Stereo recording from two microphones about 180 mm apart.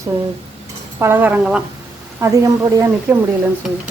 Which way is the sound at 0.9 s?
10° right (ahead or behind).